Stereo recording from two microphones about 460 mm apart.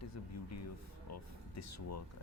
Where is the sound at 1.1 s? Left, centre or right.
Left.